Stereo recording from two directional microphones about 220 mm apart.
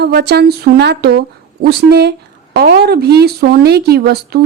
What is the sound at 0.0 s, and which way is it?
Speech, 50° right (ahead or behind).